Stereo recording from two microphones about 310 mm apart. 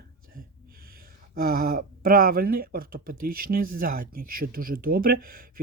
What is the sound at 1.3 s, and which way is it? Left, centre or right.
Speech, right.